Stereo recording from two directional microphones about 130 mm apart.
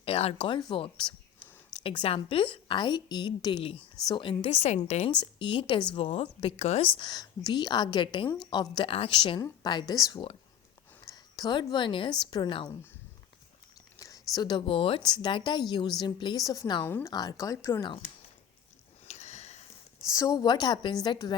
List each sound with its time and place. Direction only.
0.0 s speech: 50° left (ahead or behind)
0.4 s a woman's voice: 35° left (ahead or behind); by 5.1 s 55° left (ahead or behind)
5.2 s a woman's voice: 40° left (ahead or behind)
12.6 s speech: 15° left (ahead or behind)
14.0 s a woman's voice: 30° left (ahead or behind)
16.8 s speech: 15° left (ahead or behind)
17.1 s speech: 30° left (ahead or behind)
19.0 s sniff: 60° left (ahead or behind)
20.1 s a woman's voice: 25° left (ahead or behind)